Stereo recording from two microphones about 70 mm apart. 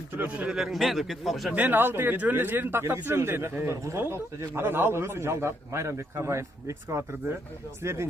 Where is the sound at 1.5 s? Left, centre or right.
Right.